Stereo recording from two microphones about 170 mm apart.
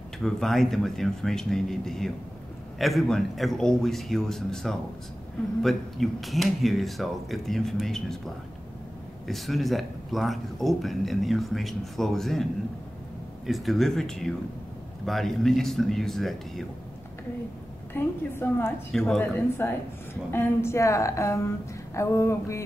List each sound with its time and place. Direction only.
0.2 s speech: centre (ahead or behind)
9.3 s speech: centre (ahead or behind)
13.5 s speech: centre (ahead or behind)
17.9 s a woman's voice: 15° left (ahead or behind)
18.9 s a woman's voice: 5° left (ahead or behind)